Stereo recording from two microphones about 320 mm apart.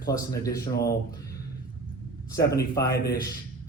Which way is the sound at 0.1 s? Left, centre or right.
Centre.